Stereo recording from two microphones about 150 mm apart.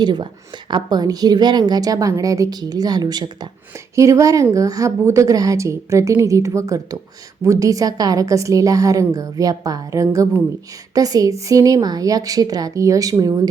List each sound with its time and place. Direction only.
0.0 s a woman's voice: 30° right (ahead or behind)